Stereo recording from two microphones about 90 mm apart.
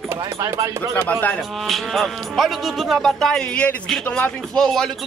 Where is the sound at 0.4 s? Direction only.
40° right (ahead or behind).